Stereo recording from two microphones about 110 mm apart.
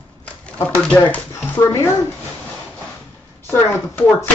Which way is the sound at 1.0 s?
20° left (ahead or behind).